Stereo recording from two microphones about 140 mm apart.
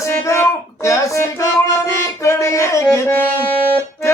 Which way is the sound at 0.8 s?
20° left (ahead or behind).